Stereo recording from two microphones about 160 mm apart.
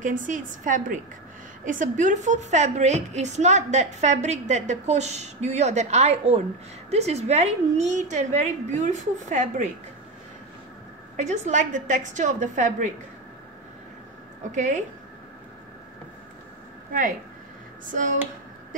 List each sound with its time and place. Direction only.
0.0 s a woman's voice: 55° right (ahead or behind)
11.1 s a woman's voice: 50° right (ahead or behind)
14.5 s a woman's voice: 50° right (ahead or behind)